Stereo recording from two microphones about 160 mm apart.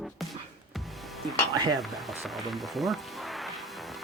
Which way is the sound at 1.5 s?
25° right (ahead or behind).